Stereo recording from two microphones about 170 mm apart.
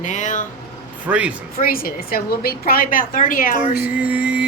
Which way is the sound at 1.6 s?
60° left (ahead or behind).